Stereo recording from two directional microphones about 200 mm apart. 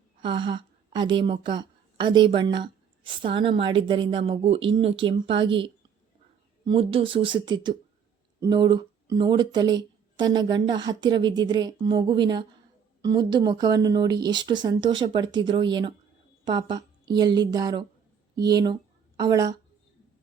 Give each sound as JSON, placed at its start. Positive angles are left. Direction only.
{"t": 0.2, "sound": "a woman's voice", "side_deg": -25}